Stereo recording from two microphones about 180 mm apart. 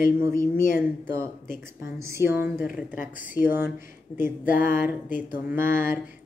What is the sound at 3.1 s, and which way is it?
Speech, 50° left (ahead or behind).